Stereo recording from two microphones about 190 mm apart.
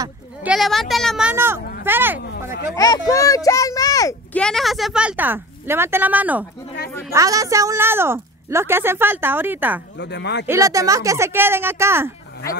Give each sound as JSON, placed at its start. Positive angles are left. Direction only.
{"t": 0.4, "sound": "a woman's voice", "side_deg": -5}
{"t": 2.7, "sound": "speech", "side_deg": 20}
{"t": 4.4, "sound": "a woman's voice", "side_deg": 0}
{"t": 9.9, "sound": "speech", "side_deg": 65}
{"t": 10.4, "sound": "a woman's voice", "side_deg": -15}